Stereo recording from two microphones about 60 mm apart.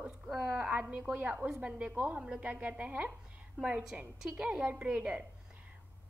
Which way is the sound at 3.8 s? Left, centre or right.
Centre.